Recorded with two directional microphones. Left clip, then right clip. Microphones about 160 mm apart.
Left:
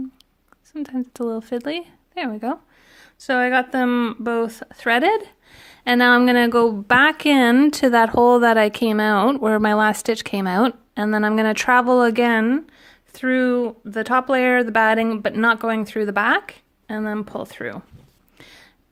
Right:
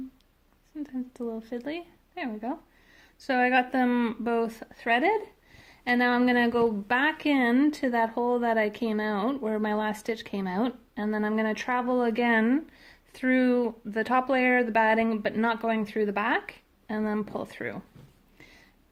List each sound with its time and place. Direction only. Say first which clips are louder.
0.8 s speech: left 9 dB; 45° left (ahead or behind)
3.0 s speech: left 6 dB; 30° left (ahead or behind)
18.3 s a sound: left 8 dB; 40° left (ahead or behind)